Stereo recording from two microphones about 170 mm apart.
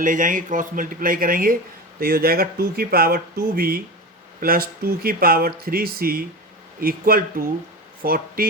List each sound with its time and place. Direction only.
0.0 s speech: 50° right (ahead or behind)